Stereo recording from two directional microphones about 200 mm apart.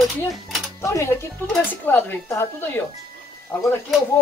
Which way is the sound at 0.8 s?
15° left (ahead or behind).